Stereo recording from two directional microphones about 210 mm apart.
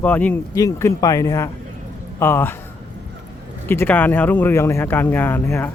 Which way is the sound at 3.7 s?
10° left (ahead or behind).